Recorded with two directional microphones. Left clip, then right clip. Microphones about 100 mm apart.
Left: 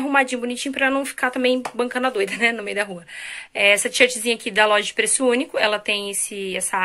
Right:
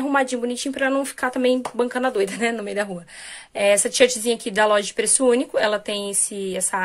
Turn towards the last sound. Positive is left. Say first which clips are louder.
# even
turn(degrees=-45)  # may be behind; listen again after turning